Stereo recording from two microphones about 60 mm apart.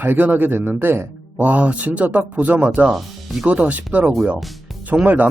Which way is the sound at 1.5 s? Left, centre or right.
Right.